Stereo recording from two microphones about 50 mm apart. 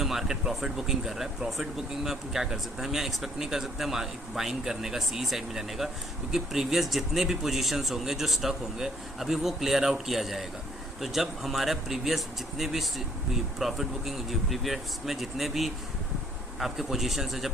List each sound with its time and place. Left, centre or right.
0.0 s speech: centre